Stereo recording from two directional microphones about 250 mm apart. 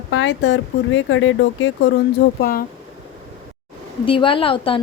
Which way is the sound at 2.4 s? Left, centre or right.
Left.